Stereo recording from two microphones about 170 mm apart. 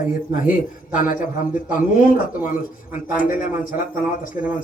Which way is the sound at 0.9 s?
50° left (ahead or behind).